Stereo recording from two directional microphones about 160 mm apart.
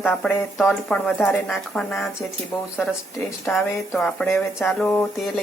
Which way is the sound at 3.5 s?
Centre (ahead or behind).